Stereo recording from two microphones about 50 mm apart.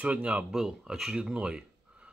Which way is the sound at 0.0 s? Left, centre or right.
Right.